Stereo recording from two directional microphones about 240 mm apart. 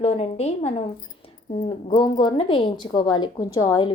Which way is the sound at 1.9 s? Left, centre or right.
Left.